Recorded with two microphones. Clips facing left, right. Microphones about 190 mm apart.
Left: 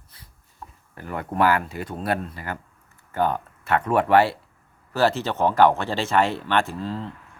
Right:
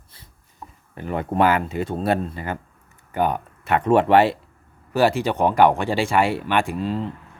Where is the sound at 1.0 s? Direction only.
20° right (ahead or behind).